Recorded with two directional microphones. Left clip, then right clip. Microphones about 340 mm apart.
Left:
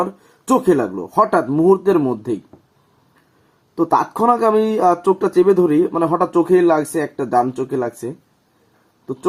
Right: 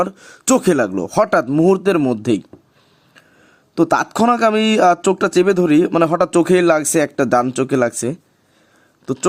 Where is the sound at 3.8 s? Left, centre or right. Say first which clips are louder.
Right 1 dB; right.